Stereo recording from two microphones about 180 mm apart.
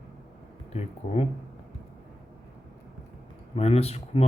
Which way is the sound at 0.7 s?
35° left (ahead or behind).